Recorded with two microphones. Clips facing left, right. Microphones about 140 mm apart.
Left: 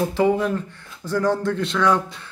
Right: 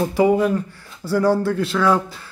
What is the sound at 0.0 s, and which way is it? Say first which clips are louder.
Speech: right 3 dB; 10° right (ahead or behind).